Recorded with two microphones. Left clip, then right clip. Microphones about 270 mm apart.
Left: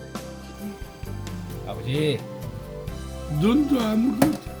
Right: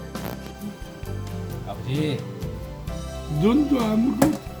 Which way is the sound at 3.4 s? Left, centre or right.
Centre.